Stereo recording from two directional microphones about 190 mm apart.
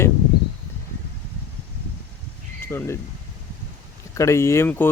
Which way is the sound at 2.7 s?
15° left (ahead or behind).